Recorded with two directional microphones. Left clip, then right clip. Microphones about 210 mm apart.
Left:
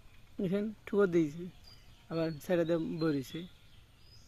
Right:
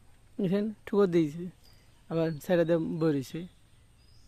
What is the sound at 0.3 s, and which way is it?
Speech, 50° right (ahead or behind).